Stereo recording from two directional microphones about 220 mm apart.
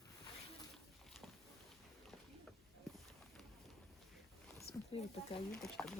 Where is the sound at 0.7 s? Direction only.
Centre (ahead or behind).